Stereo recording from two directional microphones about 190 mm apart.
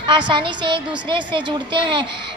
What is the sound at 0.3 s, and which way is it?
A woman's voice, 25° right (ahead or behind).